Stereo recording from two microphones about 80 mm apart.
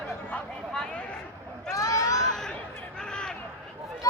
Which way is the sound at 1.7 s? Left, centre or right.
Left.